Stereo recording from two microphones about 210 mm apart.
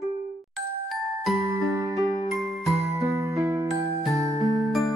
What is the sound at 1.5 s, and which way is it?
Music, 15° right (ahead or behind).